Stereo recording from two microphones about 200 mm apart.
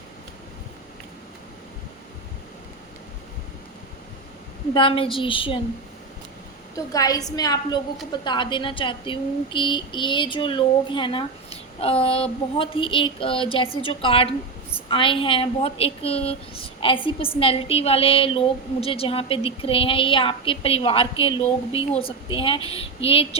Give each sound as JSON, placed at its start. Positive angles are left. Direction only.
{"t": 4.7, "sound": "a woman's voice", "side_deg": 25}
{"t": 6.7, "sound": "a woman's voice", "side_deg": 15}